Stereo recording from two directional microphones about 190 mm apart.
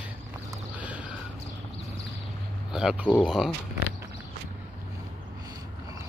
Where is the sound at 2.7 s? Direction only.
5° right (ahead or behind).